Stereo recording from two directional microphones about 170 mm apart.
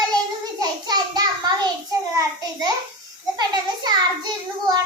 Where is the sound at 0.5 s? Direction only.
25° right (ahead or behind).